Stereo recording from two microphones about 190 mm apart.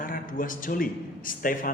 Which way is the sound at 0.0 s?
45° left (ahead or behind).